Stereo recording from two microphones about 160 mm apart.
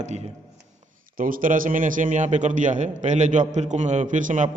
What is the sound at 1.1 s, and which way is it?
A man's voice, 60° right (ahead or behind).